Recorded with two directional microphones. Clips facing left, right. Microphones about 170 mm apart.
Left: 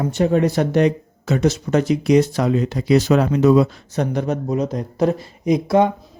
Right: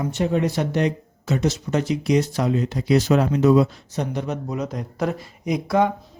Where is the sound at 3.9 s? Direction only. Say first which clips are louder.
Left 5 dB; 55° left (ahead or behind).